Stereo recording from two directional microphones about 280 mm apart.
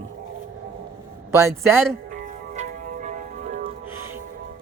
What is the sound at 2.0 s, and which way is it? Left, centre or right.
Music, right.